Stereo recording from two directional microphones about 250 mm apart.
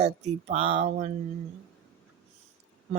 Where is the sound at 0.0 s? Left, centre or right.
Right.